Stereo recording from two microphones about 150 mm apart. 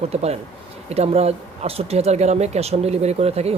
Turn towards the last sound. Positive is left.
turn(degrees=-45)  # may be behind; listen again after turning